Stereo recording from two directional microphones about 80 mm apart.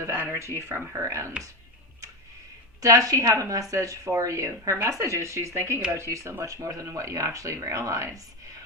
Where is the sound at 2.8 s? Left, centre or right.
Right.